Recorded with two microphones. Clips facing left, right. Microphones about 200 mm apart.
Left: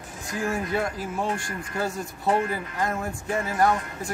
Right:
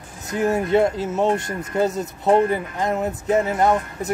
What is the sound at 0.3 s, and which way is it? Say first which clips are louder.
Speech: right 8 dB; 20° right (ahead or behind).